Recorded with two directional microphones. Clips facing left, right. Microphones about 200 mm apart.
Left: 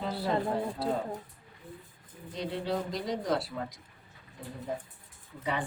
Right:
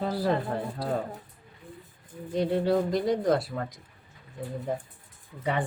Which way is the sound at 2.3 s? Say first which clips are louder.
Right 8 dB; 50° right (ahead or behind).